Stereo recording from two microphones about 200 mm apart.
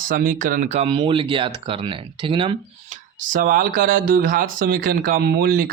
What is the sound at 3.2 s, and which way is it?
Speech, 40° right (ahead or behind).